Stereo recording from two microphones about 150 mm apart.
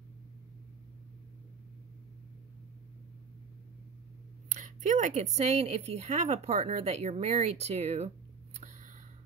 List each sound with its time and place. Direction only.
4.5 s speech: 60° right (ahead or behind)